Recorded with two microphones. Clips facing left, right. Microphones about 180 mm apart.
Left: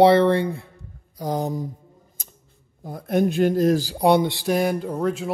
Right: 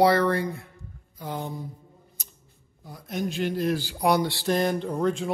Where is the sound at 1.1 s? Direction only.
40° left (ahead or behind).